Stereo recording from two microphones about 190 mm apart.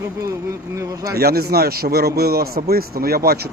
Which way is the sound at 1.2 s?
55° right (ahead or behind).